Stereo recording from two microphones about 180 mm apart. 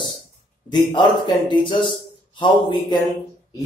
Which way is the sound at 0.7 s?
25° left (ahead or behind).